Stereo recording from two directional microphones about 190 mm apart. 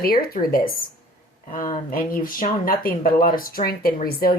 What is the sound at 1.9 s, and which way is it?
Speech, 50° left (ahead or behind).